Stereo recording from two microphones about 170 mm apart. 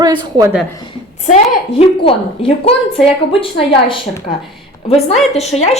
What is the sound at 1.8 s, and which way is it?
A woman's voice, 35° left (ahead or behind).